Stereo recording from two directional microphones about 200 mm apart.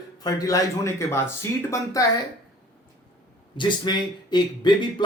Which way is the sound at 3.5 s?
20° left (ahead or behind).